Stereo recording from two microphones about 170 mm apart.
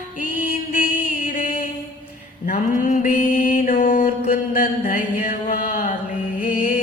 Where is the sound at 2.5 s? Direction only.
50° left (ahead or behind).